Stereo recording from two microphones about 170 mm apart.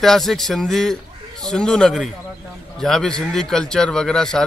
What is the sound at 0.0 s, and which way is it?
A man's voice, centre (ahead or behind).